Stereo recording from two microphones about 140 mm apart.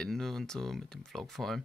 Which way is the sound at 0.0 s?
5° left (ahead or behind).